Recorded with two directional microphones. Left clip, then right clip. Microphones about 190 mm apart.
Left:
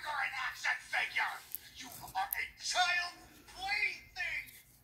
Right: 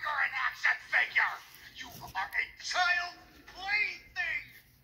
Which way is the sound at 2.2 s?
35° right (ahead or behind).